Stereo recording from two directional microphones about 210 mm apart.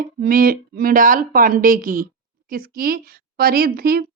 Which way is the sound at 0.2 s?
45° right (ahead or behind).